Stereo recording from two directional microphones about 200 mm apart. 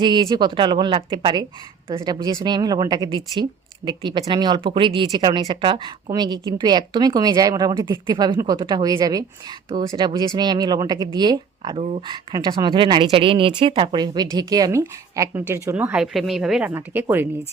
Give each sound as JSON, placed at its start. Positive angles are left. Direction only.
{"t": 0.0, "sound": "speech", "side_deg": -20}